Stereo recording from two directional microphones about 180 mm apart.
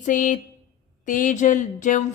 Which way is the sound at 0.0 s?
45° left (ahead or behind).